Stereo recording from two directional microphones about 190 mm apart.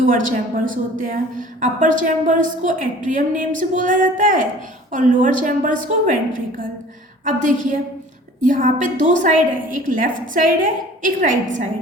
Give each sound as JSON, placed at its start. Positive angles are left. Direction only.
{"t": 0.0, "sound": "a woman's voice", "side_deg": -45}